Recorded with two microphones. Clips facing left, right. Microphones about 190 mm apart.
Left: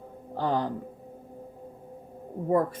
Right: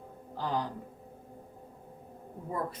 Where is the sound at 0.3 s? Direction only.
60° left (ahead or behind).